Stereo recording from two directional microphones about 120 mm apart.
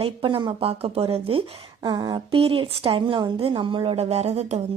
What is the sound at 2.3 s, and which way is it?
A woman's voice, 50° right (ahead or behind).